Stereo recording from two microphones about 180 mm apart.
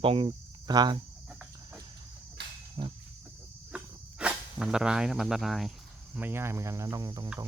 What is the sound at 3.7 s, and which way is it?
Cricket, 5° right (ahead or behind).